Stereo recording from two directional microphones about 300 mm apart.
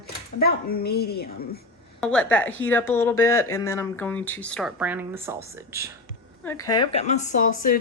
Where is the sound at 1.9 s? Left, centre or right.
Centre.